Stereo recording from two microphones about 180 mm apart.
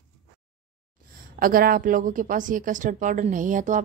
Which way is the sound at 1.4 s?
55° right (ahead or behind).